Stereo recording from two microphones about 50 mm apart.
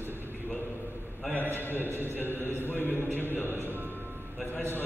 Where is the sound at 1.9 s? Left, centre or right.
Right.